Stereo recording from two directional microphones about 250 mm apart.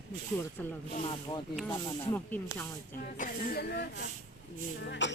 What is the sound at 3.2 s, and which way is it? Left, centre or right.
Speech, left.